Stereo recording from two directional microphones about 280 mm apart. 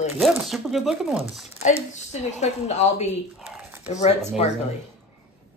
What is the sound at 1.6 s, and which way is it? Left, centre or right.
A woman's voice, left.